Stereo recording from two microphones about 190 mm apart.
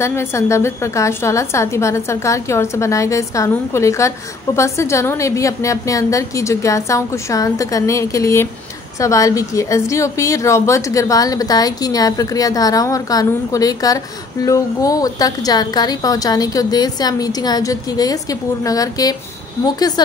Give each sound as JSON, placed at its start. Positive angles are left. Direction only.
{"t": 0.0, "sound": "a woman's voice", "side_deg": 15}